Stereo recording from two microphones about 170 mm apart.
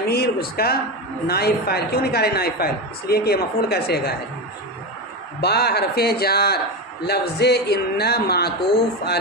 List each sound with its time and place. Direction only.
0.1 s a man's voice: 65° left (ahead or behind)
5.4 s a man's voice: 70° left (ahead or behind)